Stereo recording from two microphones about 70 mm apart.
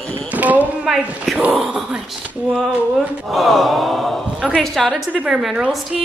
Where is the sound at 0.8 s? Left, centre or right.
Centre.